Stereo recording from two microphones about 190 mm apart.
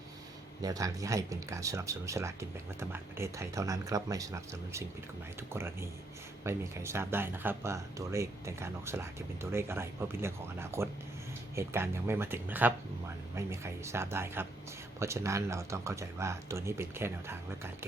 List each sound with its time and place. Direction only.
0.6 s speech: 20° right (ahead or behind)